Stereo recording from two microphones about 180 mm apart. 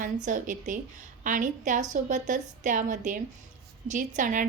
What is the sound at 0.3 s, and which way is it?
A woman's voice, 45° right (ahead or behind).